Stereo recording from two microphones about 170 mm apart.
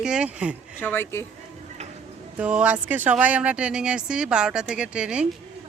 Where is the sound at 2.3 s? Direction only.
5° right (ahead or behind).